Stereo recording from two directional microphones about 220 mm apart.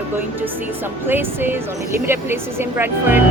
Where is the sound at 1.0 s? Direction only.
10° right (ahead or behind).